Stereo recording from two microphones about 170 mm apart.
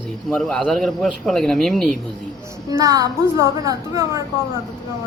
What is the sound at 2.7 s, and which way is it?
A woman's voice, 20° right (ahead or behind).